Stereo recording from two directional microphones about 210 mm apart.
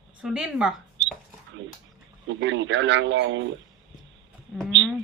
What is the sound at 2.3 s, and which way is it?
A man's voice, 60° right (ahead or behind).